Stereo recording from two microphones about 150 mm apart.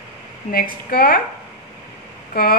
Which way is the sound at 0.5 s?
80° left.